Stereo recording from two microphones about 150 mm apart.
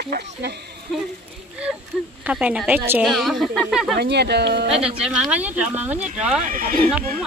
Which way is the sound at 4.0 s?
90° right.